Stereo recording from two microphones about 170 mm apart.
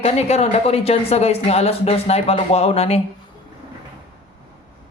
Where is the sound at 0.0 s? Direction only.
40° left (ahead or behind).